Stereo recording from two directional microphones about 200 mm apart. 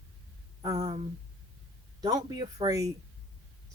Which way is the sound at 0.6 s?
20° right (ahead or behind).